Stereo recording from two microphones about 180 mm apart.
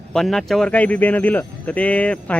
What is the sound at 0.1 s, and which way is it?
Speech, centre (ahead or behind).